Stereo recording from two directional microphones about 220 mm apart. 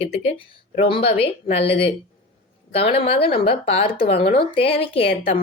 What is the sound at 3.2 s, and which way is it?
A woman's voice, 25° left (ahead or behind).